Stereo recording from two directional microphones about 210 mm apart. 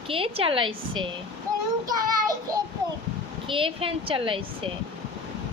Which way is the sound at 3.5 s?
25° right (ahead or behind).